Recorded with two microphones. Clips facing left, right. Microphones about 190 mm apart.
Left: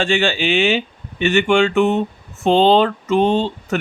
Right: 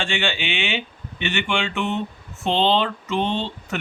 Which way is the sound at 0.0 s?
40° left (ahead or behind).